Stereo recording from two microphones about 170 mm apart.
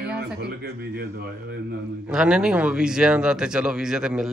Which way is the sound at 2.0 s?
5° right (ahead or behind).